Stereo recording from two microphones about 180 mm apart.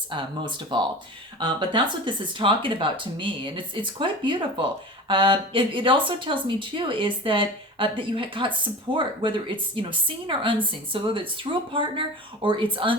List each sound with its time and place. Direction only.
0.1 s a woman's voice: 25° right (ahead or behind)